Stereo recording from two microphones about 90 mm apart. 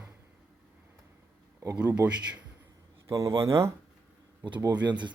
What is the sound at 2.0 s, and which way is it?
Speech, 35° right (ahead or behind).